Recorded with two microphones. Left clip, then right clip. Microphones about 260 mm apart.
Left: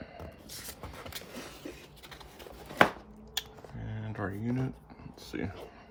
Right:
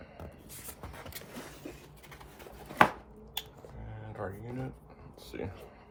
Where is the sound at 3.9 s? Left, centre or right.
Left.